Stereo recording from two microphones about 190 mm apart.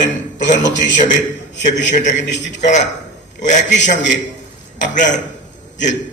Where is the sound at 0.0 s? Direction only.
40° left (ahead or behind).